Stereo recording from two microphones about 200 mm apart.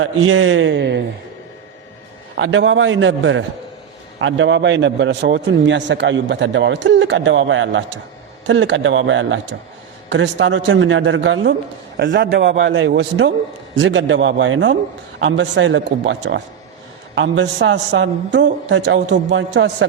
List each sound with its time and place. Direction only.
0.0 s a man's voice: 85° right; by 1.0 s 60° right (ahead or behind)
2.4 s a man's voice: 75° right (ahead or behind)